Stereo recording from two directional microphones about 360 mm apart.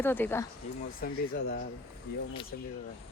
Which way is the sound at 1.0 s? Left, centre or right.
Left.